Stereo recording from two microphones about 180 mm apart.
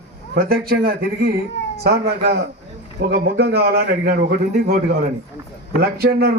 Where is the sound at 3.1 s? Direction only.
65° right (ahead or behind).